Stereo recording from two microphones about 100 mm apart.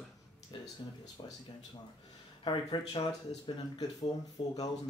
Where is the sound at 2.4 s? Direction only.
50° left (ahead or behind).